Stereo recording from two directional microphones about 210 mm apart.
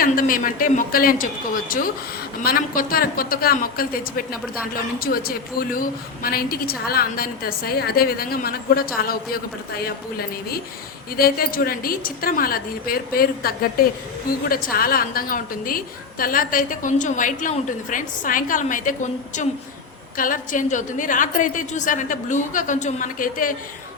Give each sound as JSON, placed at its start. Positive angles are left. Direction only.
{"t": 0.0, "sound": "a woman's voice", "side_deg": 40}
{"t": 2.4, "sound": "a man's voice", "side_deg": 45}
{"t": 9.8, "sound": "a man's voice", "side_deg": 45}